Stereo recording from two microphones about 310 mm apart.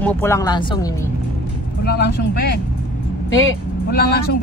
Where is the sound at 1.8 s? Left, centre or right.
Left.